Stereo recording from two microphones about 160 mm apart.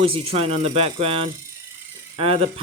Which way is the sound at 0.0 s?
35° right (ahead or behind).